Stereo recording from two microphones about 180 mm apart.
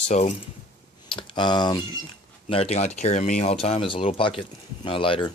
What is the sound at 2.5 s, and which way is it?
Speech, 35° left (ahead or behind).